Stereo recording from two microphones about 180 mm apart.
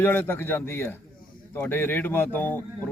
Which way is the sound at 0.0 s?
10° left (ahead or behind).